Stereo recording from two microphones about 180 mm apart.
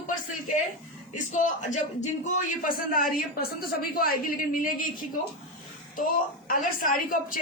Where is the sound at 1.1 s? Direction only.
40° left (ahead or behind).